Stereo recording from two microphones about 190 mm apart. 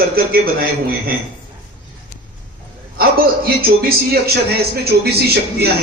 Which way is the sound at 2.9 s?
50° right (ahead or behind).